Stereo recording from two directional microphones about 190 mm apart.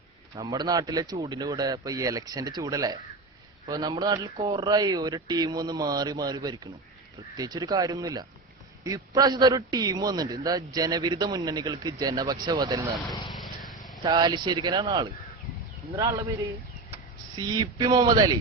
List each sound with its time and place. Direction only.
0.3 s a man's voice: 20° right (ahead or behind)
13.3 s vehicle: centre (ahead or behind)
14.0 s a man's voice: 25° right (ahead or behind)
16.9 s speech: 20° right (ahead or behind)